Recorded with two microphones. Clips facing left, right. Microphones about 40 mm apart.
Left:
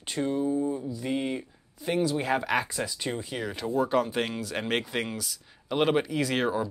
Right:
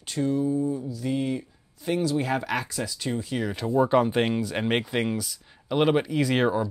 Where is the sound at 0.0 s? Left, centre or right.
Centre.